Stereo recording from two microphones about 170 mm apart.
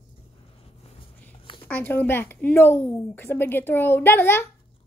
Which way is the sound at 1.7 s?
10° left (ahead or behind).